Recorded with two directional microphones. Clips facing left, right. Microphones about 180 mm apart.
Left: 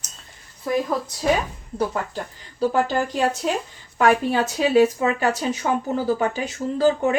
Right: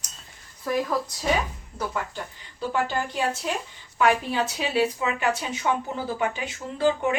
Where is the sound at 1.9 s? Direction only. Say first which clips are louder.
Left 4 dB; 40° left (ahead or behind).